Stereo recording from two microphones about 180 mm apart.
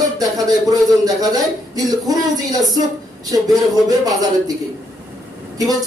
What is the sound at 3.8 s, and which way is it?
Speech, 20° right (ahead or behind).